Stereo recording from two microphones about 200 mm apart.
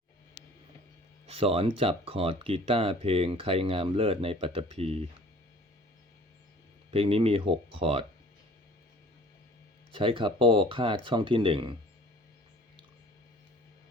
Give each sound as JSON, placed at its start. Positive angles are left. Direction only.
{"t": 1.3, "sound": "speech", "side_deg": -30}
{"t": 6.9, "sound": "speech", "side_deg": -30}
{"t": 9.9, "sound": "speech", "side_deg": -25}